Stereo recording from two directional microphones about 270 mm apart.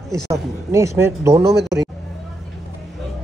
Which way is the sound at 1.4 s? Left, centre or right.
Right.